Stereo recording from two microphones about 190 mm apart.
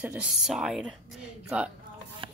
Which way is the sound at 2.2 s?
25° right (ahead or behind).